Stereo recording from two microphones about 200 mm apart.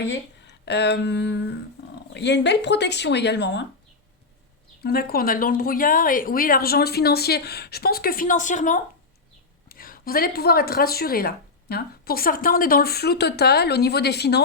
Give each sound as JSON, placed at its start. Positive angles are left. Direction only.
{"t": 0.1, "sound": "speech", "side_deg": 60}
{"t": 1.8, "sound": "roaring cats", "side_deg": 55}
{"t": 2.1, "sound": "speech", "side_deg": 60}
{"t": 4.8, "sound": "a woman's voice", "side_deg": 50}